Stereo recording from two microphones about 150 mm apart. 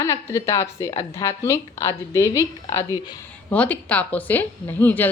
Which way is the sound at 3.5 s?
10° left (ahead or behind).